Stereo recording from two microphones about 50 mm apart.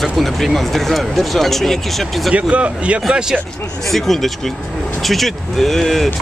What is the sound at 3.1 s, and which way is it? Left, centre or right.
Speech, centre.